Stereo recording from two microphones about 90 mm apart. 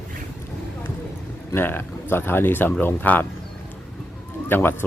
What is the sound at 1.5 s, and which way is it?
Speech, 25° left (ahead or behind).